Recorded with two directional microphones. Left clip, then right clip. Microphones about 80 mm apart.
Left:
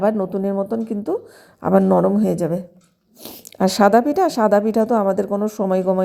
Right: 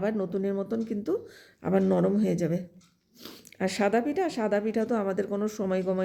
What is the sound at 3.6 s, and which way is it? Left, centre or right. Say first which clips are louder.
A woman's voice: left 12 dB; left.